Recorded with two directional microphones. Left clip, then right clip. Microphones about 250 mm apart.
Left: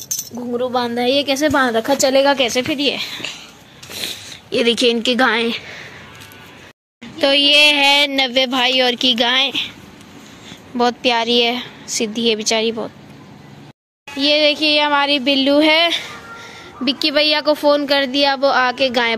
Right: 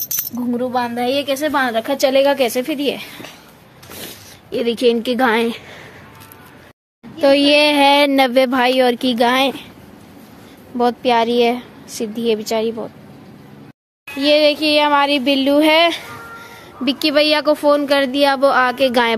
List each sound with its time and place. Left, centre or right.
0.6 s a woman's voice: centre
2.3 s speech: centre
4.5 s speech: centre
7.2 s speech: centre
10.8 s speech: centre
14.1 s speech: centre